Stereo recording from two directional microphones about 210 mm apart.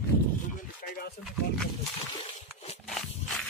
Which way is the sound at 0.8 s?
45° left (ahead or behind).